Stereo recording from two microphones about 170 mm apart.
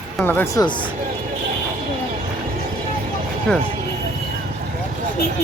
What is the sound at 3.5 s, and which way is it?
Speech, 5° left (ahead or behind).